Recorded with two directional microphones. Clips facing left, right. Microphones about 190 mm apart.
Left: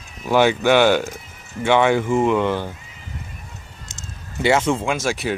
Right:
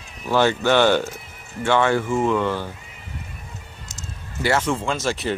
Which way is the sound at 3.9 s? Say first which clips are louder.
Right 1 dB; 20° left (ahead or behind).